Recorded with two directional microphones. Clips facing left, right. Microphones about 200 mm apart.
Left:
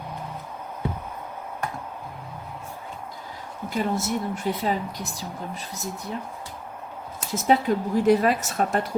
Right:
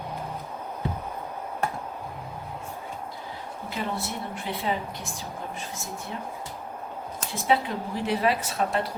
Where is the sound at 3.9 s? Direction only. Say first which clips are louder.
Left 6 dB; 45° left (ahead or behind).